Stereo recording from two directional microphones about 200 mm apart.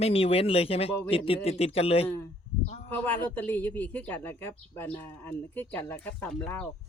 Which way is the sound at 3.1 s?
10° left (ahead or behind).